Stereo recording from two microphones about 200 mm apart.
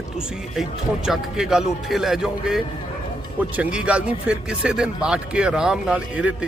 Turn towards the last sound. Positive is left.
turn(degrees=-5)  # may be behind; listen again after turning